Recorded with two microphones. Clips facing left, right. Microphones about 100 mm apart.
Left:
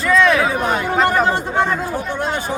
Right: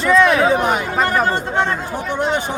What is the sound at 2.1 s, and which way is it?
Speech, 20° right (ahead or behind).